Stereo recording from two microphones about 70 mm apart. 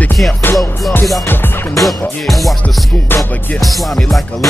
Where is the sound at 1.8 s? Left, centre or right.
Centre.